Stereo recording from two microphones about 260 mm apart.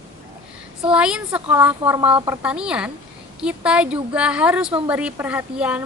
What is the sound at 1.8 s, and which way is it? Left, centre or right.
A woman's voice, centre.